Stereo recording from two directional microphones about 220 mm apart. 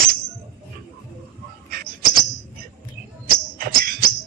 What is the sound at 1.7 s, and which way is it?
Bird, 40° right (ahead or behind).